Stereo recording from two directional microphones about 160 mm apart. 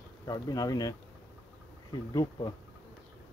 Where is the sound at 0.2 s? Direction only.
25° left (ahead or behind).